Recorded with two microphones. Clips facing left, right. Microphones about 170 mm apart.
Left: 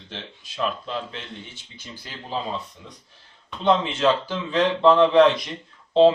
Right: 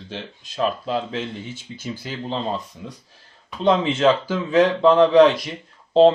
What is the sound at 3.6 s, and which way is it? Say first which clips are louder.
Speech: right 3 dB; 40° right (ahead or behind).